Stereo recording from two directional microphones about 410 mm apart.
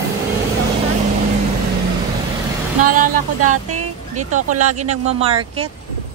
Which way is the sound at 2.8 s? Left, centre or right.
Centre.